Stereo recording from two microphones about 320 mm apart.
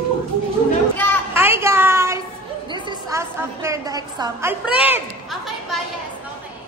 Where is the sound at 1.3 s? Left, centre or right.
Centre.